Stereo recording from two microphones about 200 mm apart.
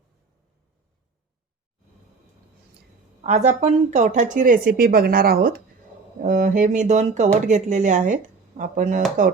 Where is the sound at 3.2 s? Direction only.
35° right (ahead or behind).